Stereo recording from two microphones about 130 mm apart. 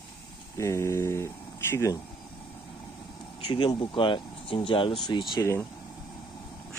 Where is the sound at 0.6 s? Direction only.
20° left (ahead or behind).